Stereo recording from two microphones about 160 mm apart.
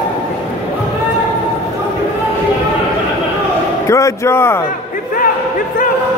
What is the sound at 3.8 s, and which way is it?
Speech, 20° left (ahead or behind).